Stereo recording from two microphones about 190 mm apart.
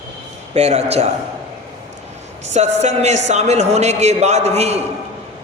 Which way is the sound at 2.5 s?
35° right (ahead or behind).